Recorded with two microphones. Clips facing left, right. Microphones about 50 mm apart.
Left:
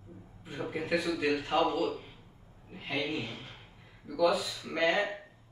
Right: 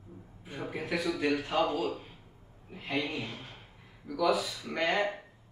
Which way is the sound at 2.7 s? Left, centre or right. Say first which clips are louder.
Even; centre.